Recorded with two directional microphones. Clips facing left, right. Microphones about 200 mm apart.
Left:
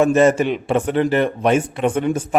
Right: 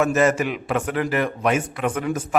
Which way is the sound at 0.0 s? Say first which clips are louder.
Left 5 dB; 30° left (ahead or behind).